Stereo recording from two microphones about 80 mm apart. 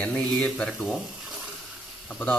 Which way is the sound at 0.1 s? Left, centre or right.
Centre.